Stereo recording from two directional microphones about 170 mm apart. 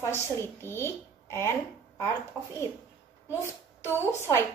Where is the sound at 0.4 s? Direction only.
15° left (ahead or behind).